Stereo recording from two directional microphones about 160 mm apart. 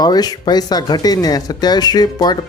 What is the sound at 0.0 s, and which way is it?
Speech, 25° left (ahead or behind).